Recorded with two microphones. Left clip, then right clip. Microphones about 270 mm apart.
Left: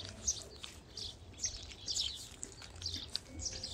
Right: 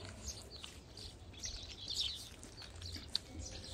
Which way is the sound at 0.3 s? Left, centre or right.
Left.